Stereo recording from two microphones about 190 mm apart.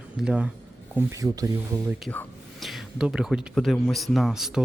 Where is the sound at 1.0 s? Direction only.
20° right (ahead or behind).